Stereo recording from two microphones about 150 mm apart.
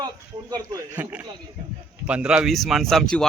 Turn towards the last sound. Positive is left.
turn(degrees=5)  # may be behind; listen again after turning